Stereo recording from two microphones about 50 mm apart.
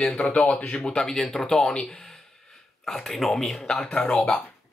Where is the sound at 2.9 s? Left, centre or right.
Centre.